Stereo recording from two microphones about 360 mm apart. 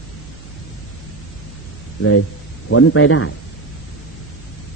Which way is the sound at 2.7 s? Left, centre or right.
Left.